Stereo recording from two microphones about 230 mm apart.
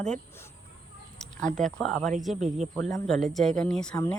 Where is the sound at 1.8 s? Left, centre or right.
Centre.